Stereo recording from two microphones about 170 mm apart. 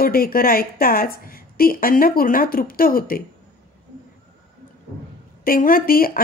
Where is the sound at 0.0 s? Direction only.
60° left (ahead or behind).